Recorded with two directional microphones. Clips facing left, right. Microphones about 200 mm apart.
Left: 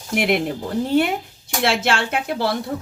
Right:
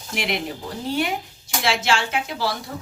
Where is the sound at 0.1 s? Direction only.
55° left (ahead or behind).